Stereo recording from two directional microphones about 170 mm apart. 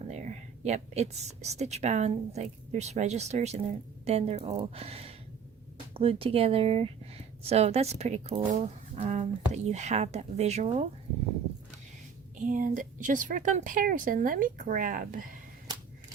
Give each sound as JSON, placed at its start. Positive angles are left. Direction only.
{"t": 0.1, "sound": "speech", "side_deg": -40}
{"t": 12.5, "sound": "a woman's voice", "side_deg": -50}